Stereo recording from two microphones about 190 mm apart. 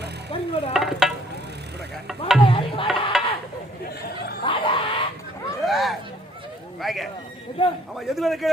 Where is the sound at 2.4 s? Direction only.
25° left (ahead or behind).